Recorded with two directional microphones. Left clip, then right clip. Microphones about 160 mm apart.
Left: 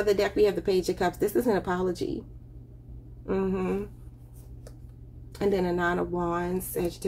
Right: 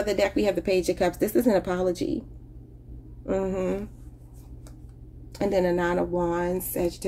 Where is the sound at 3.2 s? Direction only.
40° right (ahead or behind).